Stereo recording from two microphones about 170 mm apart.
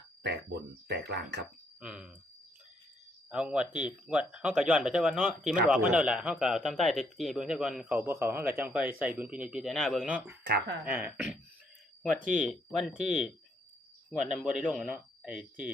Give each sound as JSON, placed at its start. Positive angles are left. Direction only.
{"t": 0.2, "sound": "speech", "side_deg": -85}
{"t": 1.8, "sound": "speech", "side_deg": -5}
{"t": 3.2, "sound": "speech", "side_deg": -5}
{"t": 10.4, "sound": "speech", "side_deg": -80}
{"t": 10.8, "sound": "speech", "side_deg": -10}
{"t": 14.5, "sound": "speech", "side_deg": -5}